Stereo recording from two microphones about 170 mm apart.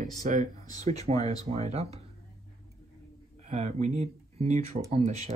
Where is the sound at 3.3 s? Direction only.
40° right (ahead or behind).